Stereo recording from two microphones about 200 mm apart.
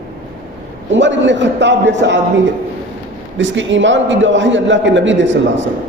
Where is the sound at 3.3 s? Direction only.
70° right (ahead or behind).